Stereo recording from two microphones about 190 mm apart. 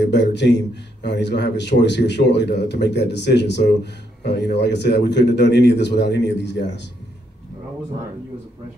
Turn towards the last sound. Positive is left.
turn(degrees=65)  # may be behind; listen again after turning